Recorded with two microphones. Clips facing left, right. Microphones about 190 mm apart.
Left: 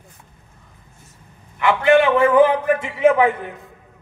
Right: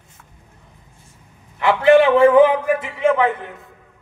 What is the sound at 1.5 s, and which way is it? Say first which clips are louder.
Speech: right 2 dB; 35° right (ahead or behind).